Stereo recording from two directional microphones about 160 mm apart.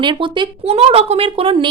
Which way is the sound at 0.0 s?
30° right (ahead or behind).